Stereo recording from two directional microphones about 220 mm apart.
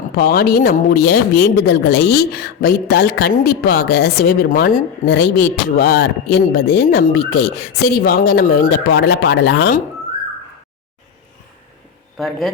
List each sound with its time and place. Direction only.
0.2 s speech: 45° left (ahead or behind)
12.1 s speech: centre (ahead or behind)